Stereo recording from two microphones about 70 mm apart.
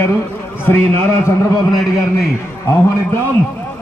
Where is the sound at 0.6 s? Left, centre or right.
Left.